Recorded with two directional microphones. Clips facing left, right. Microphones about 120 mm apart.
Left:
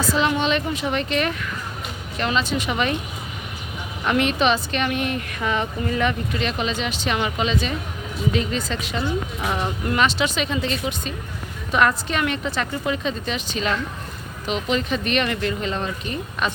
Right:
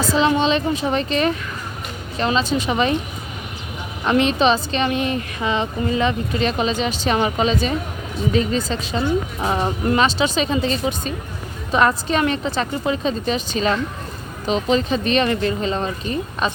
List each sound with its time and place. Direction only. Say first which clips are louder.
0.1 s a woman's voice: right 4 dB; 30° right (ahead or behind)
4.0 s a woman's voice: right 3 dB; 30° right (ahead or behind)